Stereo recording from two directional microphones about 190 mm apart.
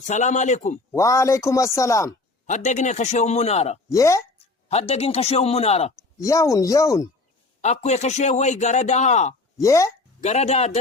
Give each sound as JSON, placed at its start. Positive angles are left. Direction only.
{"t": 0.1, "sound": "a man's voice", "side_deg": 40}
{"t": 0.9, "sound": "speech", "side_deg": 15}
{"t": 2.6, "sound": "a man's voice", "side_deg": 40}
{"t": 3.9, "sound": "speech", "side_deg": 15}
{"t": 4.7, "sound": "a man's voice", "side_deg": 30}
{"t": 6.1, "sound": "speech", "side_deg": 15}
{"t": 7.6, "sound": "a man's voice", "side_deg": 35}
{"t": 9.6, "sound": "speech", "side_deg": 15}
{"t": 10.2, "sound": "a man's voice", "side_deg": 35}